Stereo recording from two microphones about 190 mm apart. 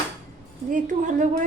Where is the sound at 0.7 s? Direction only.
45° right (ahead or behind).